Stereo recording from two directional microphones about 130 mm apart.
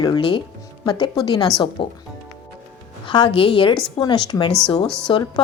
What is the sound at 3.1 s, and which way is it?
Speech, 40° left (ahead or behind).